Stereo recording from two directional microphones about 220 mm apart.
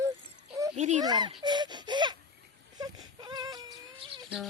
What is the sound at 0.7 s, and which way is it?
Speech, 35° right (ahead or behind).